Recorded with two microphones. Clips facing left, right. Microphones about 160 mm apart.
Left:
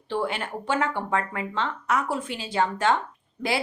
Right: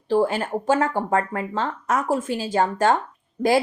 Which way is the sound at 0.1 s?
40° right (ahead or behind).